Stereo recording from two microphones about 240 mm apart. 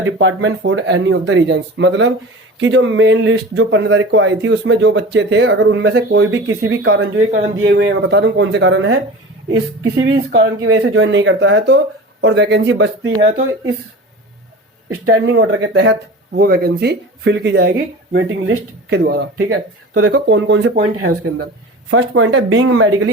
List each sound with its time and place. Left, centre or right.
0.0 s speech: right
7.3 s speech: right
7.6 s speech: right
15.4 s speech: right
20.7 s speech: right
21.8 s speech: right